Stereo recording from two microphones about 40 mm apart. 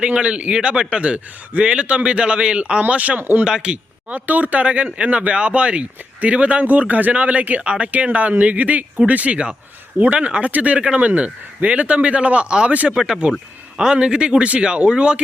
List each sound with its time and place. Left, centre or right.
0.2 s a man's voice: right
2.8 s speech: right
3.2 s speech: right
3.4 s a man's voice: right
4.1 s a man's voice: right
7.6 s a man's voice: right
7.9 s a man's voice: right